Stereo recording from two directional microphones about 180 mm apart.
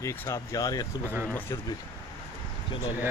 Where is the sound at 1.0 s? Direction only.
10° right (ahead or behind).